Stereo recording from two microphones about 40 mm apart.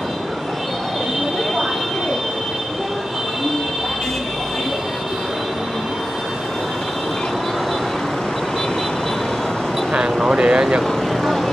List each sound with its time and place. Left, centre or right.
10.2 s vehicle: right
10.8 s vehicle: centre